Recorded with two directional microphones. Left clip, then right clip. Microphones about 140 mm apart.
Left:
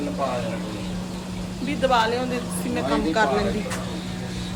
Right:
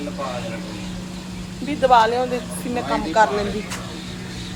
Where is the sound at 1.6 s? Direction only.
20° right (ahead or behind).